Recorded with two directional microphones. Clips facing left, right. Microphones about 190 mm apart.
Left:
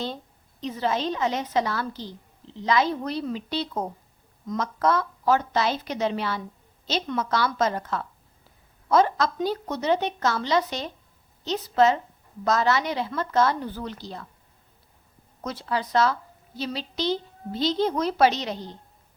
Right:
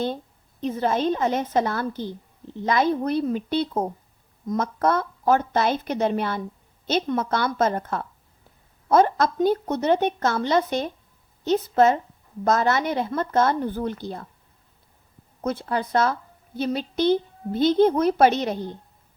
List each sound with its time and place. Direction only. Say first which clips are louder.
0.6 s a woman's voice: right 4 dB; 50° right (ahead or behind)
15.4 s a woman's voice: right 3 dB; 55° right (ahead or behind)